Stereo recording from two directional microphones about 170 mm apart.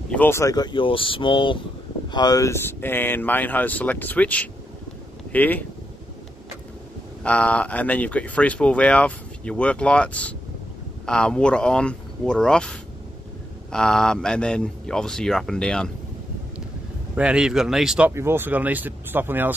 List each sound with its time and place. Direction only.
0.1 s speech: 10° left (ahead or behind)
7.2 s speech: 5° left (ahead or behind)
17.1 s speech: 5° right (ahead or behind)